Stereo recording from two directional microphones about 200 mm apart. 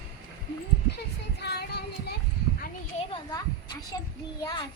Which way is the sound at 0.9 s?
55° left (ahead or behind).